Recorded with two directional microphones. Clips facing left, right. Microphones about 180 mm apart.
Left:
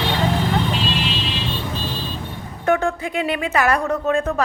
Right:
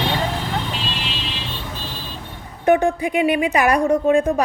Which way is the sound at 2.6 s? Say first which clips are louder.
Right 3 dB; 15° right (ahead or behind).